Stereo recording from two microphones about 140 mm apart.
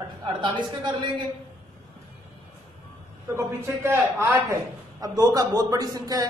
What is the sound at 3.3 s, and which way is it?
A man's voice, 20° right (ahead or behind).